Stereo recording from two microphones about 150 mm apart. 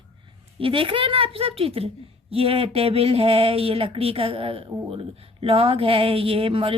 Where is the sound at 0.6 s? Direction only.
35° right (ahead or behind).